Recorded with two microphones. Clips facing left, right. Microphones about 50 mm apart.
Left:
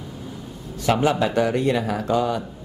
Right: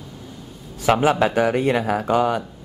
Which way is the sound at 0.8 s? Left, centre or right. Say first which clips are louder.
Right 3 dB; right.